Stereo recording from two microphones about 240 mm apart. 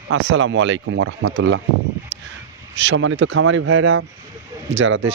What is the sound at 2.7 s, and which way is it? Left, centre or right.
Speech, right.